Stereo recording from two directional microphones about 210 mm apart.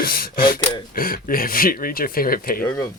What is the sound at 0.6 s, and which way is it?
Speech, 20° left (ahead or behind).